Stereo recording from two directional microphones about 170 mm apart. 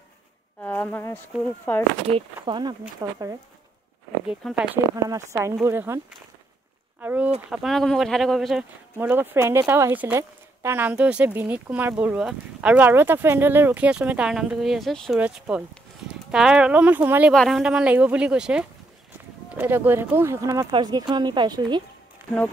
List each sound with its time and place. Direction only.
0.6 s speech: 10° left (ahead or behind)
2.0 s speech: 30° right (ahead or behind)
4.3 s speech: 5° right (ahead or behind)
5.1 s speech: 20° right (ahead or behind)
7.0 s speech: 10° right (ahead or behind)
7.5 s speech: centre (ahead or behind)
17.3 s speech: centre (ahead or behind); by 21.8 s 25° right (ahead or behind)